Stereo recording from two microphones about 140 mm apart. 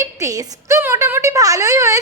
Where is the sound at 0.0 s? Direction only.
20° right (ahead or behind).